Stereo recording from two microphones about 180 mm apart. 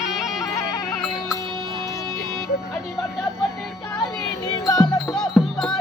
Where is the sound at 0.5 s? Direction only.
20° left (ahead or behind).